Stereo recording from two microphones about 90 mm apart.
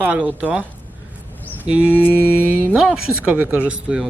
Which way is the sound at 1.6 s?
15° right (ahead or behind).